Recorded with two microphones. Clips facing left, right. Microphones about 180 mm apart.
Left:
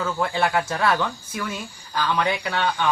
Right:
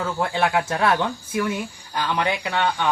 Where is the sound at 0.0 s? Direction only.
20° right (ahead or behind).